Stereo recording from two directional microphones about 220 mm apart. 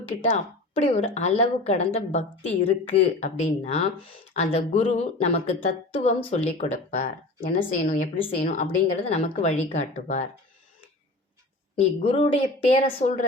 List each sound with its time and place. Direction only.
0.3 s a woman's voice: 30° left (ahead or behind)
11.8 s a woman's voice: 25° left (ahead or behind)